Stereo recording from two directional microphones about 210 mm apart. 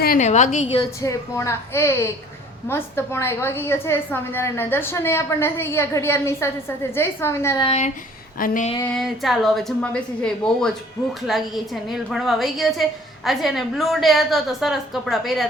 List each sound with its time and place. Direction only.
0.0 s a woman's voice: 40° left (ahead or behind)
0.8 s a woman's voice: 15° left (ahead or behind)
7.6 s a woman's voice: 30° left (ahead or behind)
8.8 s a woman's voice: centre (ahead or behind)